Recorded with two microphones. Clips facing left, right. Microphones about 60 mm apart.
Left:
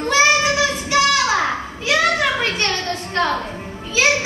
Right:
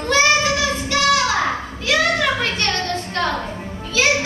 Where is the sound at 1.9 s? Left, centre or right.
Centre.